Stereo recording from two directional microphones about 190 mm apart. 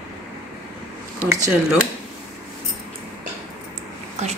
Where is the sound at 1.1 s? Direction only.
15° right (ahead or behind).